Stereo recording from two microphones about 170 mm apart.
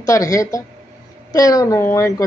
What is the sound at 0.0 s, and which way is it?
A man's voice, 20° left (ahead or behind).